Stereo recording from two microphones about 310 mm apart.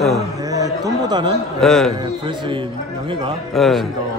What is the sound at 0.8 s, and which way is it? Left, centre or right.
Speech, centre.